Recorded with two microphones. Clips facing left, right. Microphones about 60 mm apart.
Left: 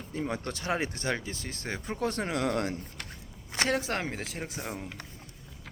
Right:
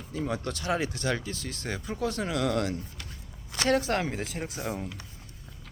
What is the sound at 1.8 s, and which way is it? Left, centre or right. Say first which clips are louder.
Speech: even; left.